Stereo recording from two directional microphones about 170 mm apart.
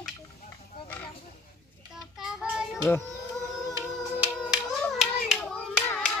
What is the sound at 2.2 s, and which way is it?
Child singing, 5° right (ahead or behind).